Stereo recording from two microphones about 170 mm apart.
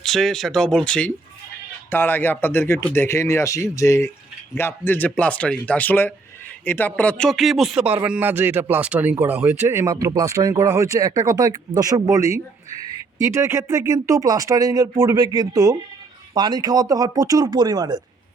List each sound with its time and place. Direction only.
0.0 s speech: centre (ahead or behind); by 18.0 s 25° right (ahead or behind)